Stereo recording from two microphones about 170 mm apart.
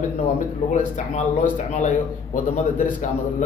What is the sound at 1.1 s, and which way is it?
Speech, 50° left (ahead or behind).